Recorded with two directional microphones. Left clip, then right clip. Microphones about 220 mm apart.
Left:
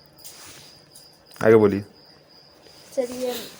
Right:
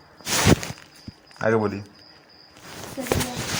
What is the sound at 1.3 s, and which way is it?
Speech, 50° left (ahead or behind).